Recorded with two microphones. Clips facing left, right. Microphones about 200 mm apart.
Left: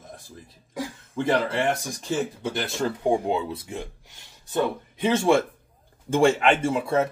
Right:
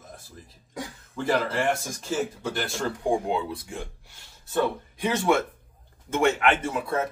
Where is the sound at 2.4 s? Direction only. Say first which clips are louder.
Left 2 dB; 20° left (ahead or behind).